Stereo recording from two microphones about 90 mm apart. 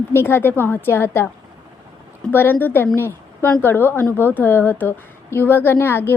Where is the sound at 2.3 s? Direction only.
25° left (ahead or behind).